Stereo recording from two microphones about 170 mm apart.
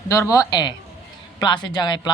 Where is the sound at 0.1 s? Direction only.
20° left (ahead or behind).